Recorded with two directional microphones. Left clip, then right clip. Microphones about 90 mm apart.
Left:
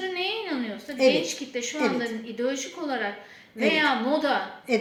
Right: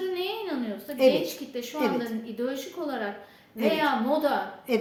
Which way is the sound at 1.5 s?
35° right (ahead or behind).